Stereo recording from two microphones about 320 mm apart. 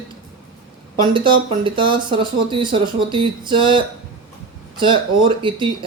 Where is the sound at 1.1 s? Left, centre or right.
Centre.